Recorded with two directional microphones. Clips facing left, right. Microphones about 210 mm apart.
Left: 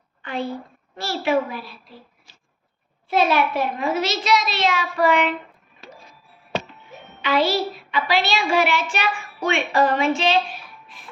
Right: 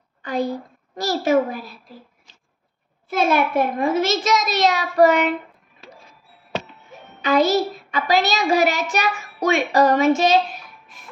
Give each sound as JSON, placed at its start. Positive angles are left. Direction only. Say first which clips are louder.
{"t": 0.2, "sound": "a child's voice", "louder": "right 4 dB", "side_deg": -40}
{"t": 3.1, "sound": "a child's voice", "louder": "even", "side_deg": -45}
{"t": 7.2, "sound": "a child's voice", "louder": "right 3 dB", "side_deg": -45}